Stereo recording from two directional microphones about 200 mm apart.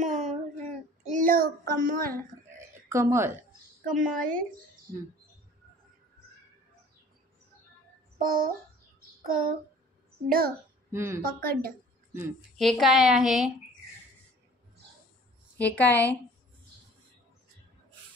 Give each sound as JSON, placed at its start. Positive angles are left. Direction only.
{"t": 0.0, "sound": "child singing", "side_deg": -35}
{"t": 2.9, "sound": "a woman's voice", "side_deg": -15}
{"t": 3.8, "sound": "a woman's voice", "side_deg": -40}
{"t": 8.2, "sound": "a sound", "side_deg": -45}
{"t": 10.2, "sound": "a woman's voice", "side_deg": -45}
{"t": 10.9, "sound": "a woman's voice", "side_deg": -15}
{"t": 11.2, "sound": "a woman's voice", "side_deg": -45}
{"t": 12.1, "sound": "a woman's voice", "side_deg": -10}
{"t": 12.5, "sound": "a woman's voice", "side_deg": 0}
{"t": 15.5, "sound": "a woman's voice", "side_deg": 10}